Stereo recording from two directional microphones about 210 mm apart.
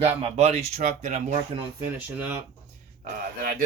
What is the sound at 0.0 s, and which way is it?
Speech, 30° right (ahead or behind).